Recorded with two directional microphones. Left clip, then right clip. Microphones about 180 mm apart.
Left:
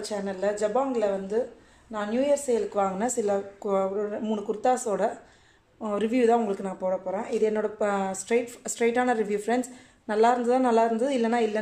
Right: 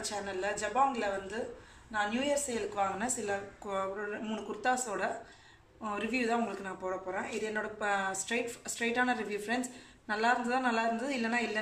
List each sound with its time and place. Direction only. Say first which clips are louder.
0.0 s speech: left 7 dB; 35° left (ahead or behind)